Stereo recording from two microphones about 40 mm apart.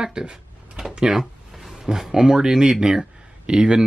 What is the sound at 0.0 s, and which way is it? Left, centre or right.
Speech, centre.